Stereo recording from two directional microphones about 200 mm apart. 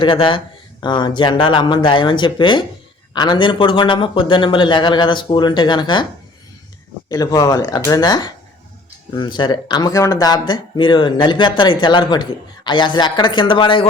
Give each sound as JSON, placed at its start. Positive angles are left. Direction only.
{"t": 0.0, "sound": "speech", "side_deg": 25}
{"t": 7.1, "sound": "speech", "side_deg": 20}